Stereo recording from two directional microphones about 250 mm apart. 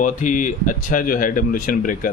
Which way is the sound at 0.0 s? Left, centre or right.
Left.